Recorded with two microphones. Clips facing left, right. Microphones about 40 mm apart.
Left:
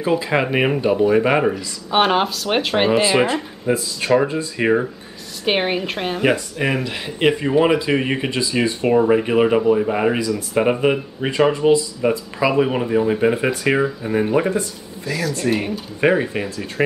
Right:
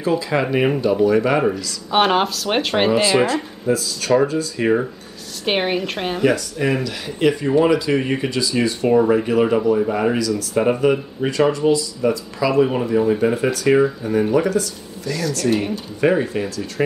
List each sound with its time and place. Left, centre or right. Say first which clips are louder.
0.0 s speech: left 1 dB; left
1.9 s speech: even; centre
3.0 s speech: even; centre
3.6 s speech: even; left
5.4 s speech: even; centre
6.2 s speech: right 1 dB; left
15.0 s speech: right 1 dB; centre
16.0 s speech: even; left